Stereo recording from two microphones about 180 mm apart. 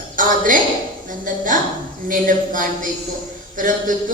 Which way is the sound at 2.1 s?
50° right (ahead or behind).